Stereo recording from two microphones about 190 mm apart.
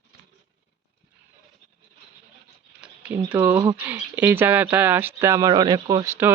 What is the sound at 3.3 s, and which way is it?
Speech, 15° right (ahead or behind).